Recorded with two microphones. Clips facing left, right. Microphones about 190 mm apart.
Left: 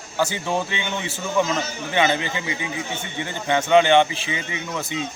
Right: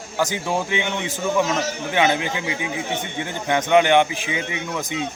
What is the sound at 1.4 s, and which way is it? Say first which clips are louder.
Speech: left 2 dB; 70° right (ahead or behind).